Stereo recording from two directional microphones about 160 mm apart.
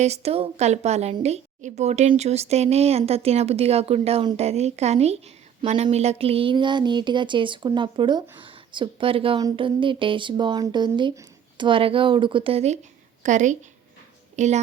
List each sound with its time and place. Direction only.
0.0 s a woman's voice: 40° right (ahead or behind)